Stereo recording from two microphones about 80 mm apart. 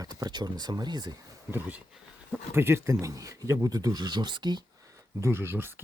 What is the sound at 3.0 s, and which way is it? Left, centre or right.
Speech, right.